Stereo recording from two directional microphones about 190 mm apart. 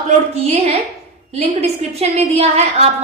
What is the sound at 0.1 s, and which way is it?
A woman's voice, 35° right (ahead or behind).